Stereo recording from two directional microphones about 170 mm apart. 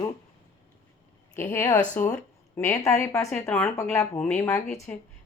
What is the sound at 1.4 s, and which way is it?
Speech, 15° left (ahead or behind).